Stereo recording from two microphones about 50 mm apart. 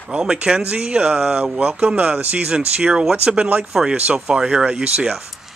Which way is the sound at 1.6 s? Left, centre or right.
Right.